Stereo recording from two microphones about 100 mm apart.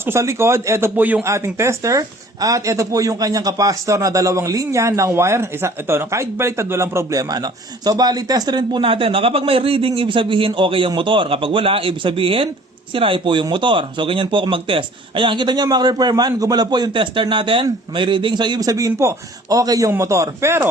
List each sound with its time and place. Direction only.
0.0 s speech: 30° right (ahead or behind)
1.2 s speech: 30° right (ahead or behind); by 8.8 s 45° right (ahead or behind)
8.8 s a man's voice: 60° right (ahead or behind); by 20.7 s 25° right (ahead or behind)